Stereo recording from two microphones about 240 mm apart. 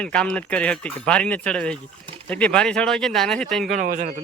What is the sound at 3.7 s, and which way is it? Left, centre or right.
Speech, right.